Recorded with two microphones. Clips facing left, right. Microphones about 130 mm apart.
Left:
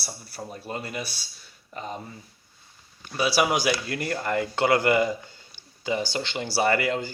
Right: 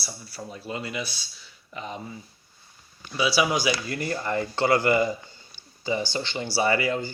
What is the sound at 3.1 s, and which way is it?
Speech, 45° left (ahead or behind).